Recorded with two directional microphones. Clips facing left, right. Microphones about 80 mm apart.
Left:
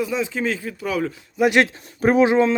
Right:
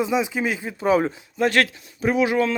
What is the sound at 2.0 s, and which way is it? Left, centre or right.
Speech, left.